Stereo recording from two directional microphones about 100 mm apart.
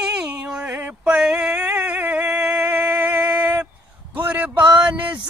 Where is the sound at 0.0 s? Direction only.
10° right (ahead or behind).